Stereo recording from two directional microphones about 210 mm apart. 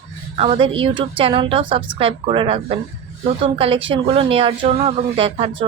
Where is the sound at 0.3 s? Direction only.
25° right (ahead or behind).